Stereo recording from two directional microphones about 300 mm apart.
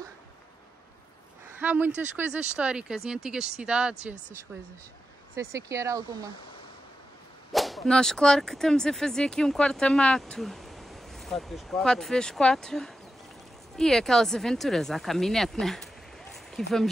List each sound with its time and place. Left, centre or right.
1.6 s speech: centre
2.0 s whip: centre
5.3 s speech: centre
7.5 s whip: centre
16.4 s speech: centre